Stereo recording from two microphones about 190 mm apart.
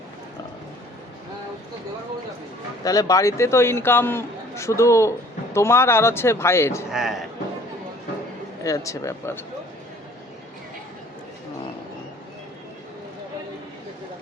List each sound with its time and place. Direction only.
2.8 s a man's voice: 20° left (ahead or behind)
6.9 s a man's voice: centre (ahead or behind)
8.6 s a man's voice: 15° left (ahead or behind)